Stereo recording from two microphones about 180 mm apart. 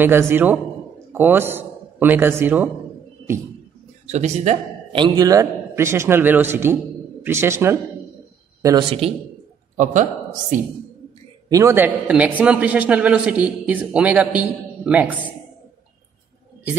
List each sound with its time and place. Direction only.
0.0 s a man's voice: 15° right (ahead or behind)
4.1 s speech: 40° right (ahead or behind)
4.9 s a man's voice: 25° right (ahead or behind)
8.6 s a man's voice: 30° right (ahead or behind)
11.4 s a man's voice: 15° right (ahead or behind)